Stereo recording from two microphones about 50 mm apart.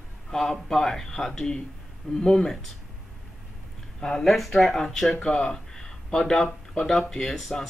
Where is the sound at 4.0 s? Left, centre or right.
Centre.